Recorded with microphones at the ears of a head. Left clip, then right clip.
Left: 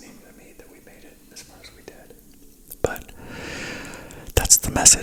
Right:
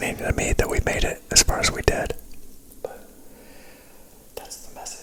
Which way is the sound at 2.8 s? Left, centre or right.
Left.